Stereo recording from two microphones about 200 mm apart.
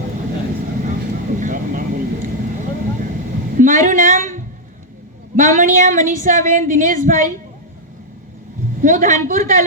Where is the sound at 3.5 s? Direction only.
40° right (ahead or behind).